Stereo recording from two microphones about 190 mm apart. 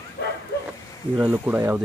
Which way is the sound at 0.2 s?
60° left (ahead or behind).